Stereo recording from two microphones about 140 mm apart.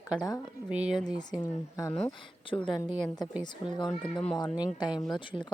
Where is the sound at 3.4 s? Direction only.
30° left (ahead or behind).